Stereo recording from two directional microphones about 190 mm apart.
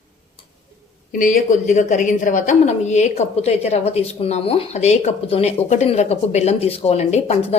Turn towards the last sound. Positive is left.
turn(degrees=35)  # may be behind; listen again after turning